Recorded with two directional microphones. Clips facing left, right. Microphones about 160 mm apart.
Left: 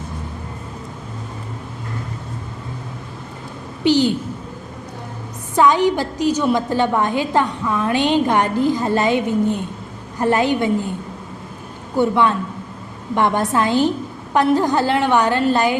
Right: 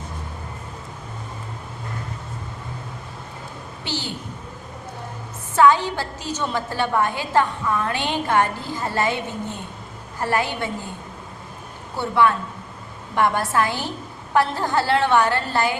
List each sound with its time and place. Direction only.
3.8 s a sound: 15° left (ahead or behind)
5.5 s a woman's voice: 15° left (ahead or behind)
11.9 s a woman's voice: 20° left (ahead or behind)